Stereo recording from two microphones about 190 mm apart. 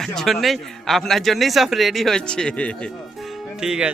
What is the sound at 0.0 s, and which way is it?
A man's voice, centre (ahead or behind).